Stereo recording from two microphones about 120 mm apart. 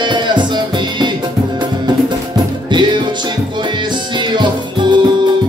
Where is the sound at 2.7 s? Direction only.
40° right (ahead or behind).